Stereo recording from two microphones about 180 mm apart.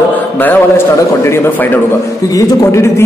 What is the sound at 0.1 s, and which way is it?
A man's voice, 10° left (ahead or behind).